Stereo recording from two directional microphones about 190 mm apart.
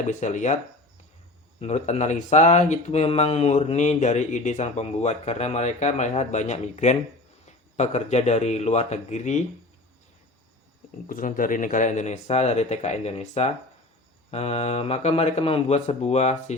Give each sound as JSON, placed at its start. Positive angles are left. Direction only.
{"t": 0.1, "sound": "speech", "side_deg": 40}
{"t": 1.5, "sound": "speech", "side_deg": 35}
{"t": 11.1, "sound": "speech", "side_deg": 45}